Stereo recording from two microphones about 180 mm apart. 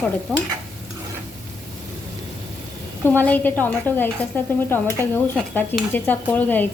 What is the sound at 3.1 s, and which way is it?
Speech, 10° left (ahead or behind).